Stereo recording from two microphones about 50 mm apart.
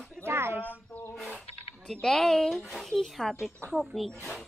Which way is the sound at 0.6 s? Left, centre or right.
Left.